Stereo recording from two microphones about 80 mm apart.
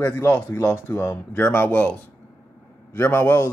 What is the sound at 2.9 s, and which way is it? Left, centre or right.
Speech, left.